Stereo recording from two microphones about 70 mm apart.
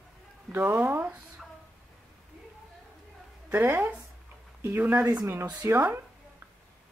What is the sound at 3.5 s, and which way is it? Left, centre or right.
Speech, right.